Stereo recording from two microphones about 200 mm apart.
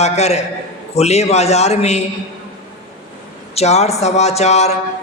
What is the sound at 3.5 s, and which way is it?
Speech, 35° left (ahead or behind).